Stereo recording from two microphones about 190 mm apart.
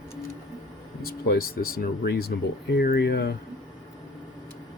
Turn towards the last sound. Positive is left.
turn(degrees=60)  # may be behind; listen again after turning